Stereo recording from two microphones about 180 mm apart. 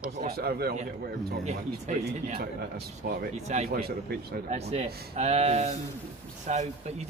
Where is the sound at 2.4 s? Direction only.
60° right (ahead or behind).